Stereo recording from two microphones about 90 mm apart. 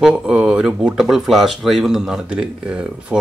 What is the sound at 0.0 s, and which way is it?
Speech, 5° right (ahead or behind).